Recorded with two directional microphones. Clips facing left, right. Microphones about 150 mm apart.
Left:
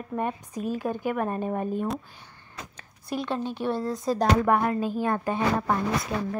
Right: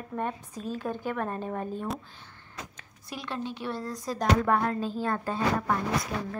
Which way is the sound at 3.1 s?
45° left (ahead or behind).